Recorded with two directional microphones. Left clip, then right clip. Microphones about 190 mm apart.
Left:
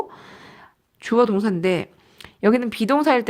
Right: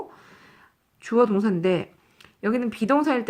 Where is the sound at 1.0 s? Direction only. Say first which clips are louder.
Left 2 dB; 40° left (ahead or behind).